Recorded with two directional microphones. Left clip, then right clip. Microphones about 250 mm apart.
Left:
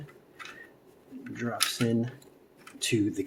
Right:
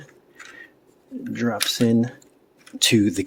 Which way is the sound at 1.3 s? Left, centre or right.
Right.